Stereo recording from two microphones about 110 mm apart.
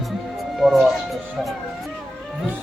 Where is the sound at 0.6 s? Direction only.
Centre (ahead or behind).